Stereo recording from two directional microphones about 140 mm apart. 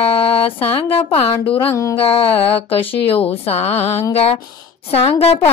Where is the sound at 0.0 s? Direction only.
45° left (ahead or behind).